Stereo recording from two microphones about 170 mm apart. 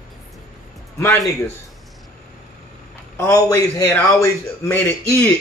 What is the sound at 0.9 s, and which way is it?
Speech, 15° left (ahead or behind).